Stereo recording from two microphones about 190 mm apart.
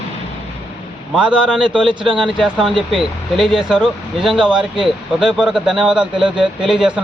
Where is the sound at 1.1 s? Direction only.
5° right (ahead or behind).